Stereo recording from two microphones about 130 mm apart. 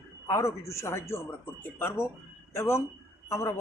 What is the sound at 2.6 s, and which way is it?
Speech, 20° left (ahead or behind).